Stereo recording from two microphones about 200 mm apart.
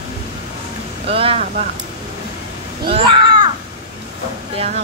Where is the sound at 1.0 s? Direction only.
30° right (ahead or behind).